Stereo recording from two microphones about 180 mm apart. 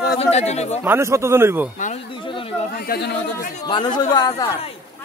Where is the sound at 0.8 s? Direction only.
15° right (ahead or behind).